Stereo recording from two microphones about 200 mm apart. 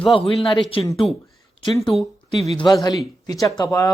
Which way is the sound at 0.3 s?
25° left (ahead or behind).